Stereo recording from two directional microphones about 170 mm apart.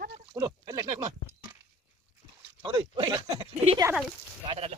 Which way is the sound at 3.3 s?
40° right (ahead or behind).